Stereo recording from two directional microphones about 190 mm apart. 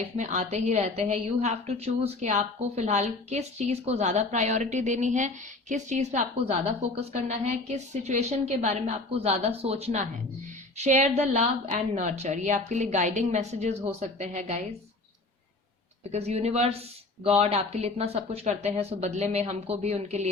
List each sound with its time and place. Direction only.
0.2 s a woman's voice: 40° right (ahead or behind)
16.1 s a woman's voice: 35° right (ahead or behind)